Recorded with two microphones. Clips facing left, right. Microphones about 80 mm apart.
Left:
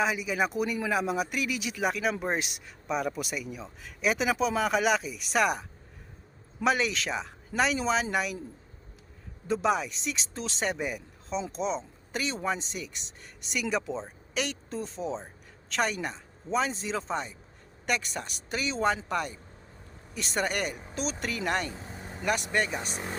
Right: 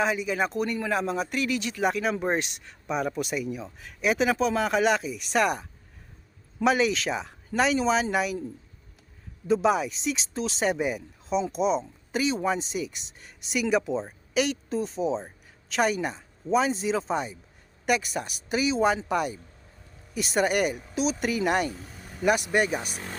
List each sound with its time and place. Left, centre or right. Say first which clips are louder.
0.0 s speech: right 2 dB; centre
9.5 s speech: right 4 dB; centre
21.7 s vehicle: even; left
22.2 s speech: right 5 dB; centre